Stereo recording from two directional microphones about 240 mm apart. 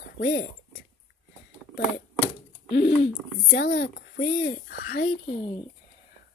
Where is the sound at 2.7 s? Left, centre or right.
Left.